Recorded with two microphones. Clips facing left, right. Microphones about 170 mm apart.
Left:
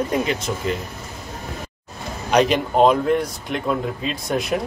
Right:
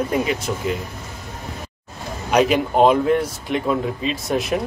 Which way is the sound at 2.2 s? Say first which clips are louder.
Right 1 dB; 5° right (ahead or behind).